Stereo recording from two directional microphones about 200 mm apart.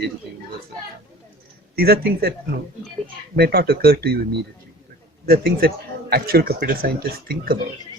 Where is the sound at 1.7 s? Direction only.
50° right (ahead or behind).